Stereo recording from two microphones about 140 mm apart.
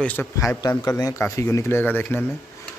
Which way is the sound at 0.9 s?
25° left (ahead or behind).